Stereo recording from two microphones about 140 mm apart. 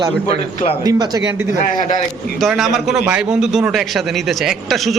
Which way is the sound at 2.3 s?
Centre (ahead or behind).